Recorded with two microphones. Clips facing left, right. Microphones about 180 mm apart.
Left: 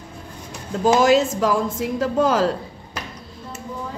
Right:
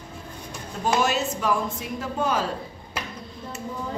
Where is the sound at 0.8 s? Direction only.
90° left.